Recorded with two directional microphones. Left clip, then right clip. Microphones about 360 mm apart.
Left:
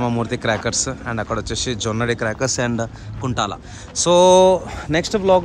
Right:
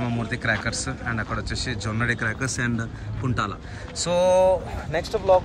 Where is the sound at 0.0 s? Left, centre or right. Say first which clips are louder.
Left 6 dB; centre.